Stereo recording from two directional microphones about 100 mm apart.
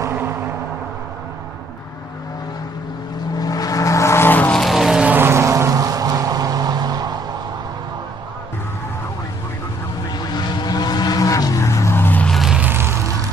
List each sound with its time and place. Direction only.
0.0 s a sound: 20° right (ahead or behind)
3.3 s vehicle: 40° left (ahead or behind); by 4.6 s 20° left (ahead or behind)
4.6 s vehicle: centre (ahead or behind)
5.1 s vehicle: 25° right (ahead or behind); by 7.2 s 45° right (ahead or behind)
10.1 s vehicle: 45° left (ahead or behind); by 12.3 s 20° left (ahead or behind)
12.3 s music: centre (ahead or behind)
12.6 s music: 25° right (ahead or behind)